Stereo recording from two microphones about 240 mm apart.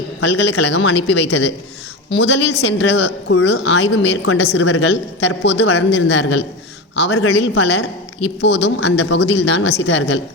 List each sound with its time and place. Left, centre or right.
0.2 s a woman's voice: left